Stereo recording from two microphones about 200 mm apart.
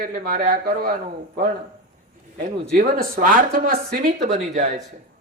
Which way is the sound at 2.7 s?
45° right (ahead or behind).